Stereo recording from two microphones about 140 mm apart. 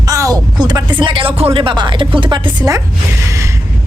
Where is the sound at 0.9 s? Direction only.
35° right (ahead or behind).